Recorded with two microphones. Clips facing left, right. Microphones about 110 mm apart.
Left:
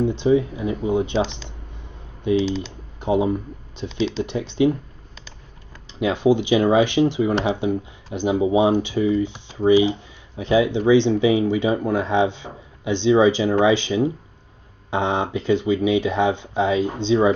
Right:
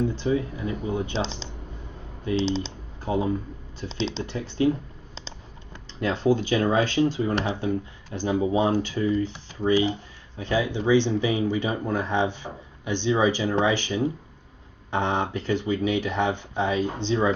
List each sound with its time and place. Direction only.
0.0 s speech: 20° left (ahead or behind)
3.0 s speech: 20° left (ahead or behind)
3.9 s speech: 30° right (ahead or behind)
4.2 s speech: 20° left (ahead or behind)
5.9 s speech: 15° left (ahead or behind)